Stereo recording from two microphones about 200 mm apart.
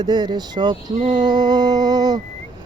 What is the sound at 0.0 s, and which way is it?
Speech, 20° right (ahead or behind).